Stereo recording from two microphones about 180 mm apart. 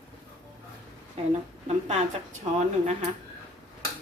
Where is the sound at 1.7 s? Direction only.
40° right (ahead or behind).